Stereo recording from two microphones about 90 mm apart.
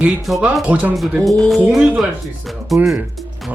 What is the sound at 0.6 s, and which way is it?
Speech, 15° right (ahead or behind).